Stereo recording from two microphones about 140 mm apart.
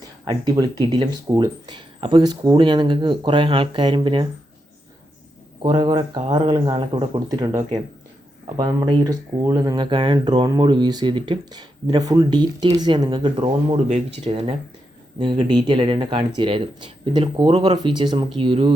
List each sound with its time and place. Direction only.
0.3 s speech: 30° right (ahead or behind)
5.6 s speech: 30° right (ahead or behind)
13.8 s speech: 45° right (ahead or behind)